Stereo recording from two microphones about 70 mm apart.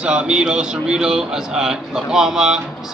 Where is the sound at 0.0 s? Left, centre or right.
Centre.